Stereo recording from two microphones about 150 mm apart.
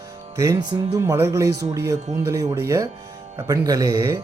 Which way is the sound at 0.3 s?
25° right (ahead or behind).